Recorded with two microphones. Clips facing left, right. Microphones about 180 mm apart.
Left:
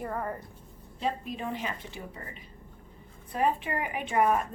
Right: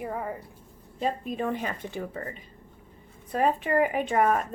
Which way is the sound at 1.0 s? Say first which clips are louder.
Right 4 dB; 50° right (ahead or behind).